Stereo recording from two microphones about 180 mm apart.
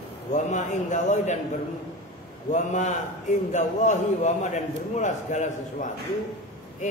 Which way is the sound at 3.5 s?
40° left (ahead or behind).